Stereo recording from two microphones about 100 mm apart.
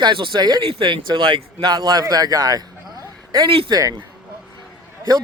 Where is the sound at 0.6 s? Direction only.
60° right (ahead or behind); by 2.6 s 40° right (ahead or behind).